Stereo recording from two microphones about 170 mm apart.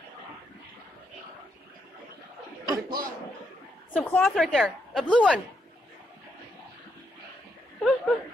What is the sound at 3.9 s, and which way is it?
A woman's voice, 10° left (ahead or behind).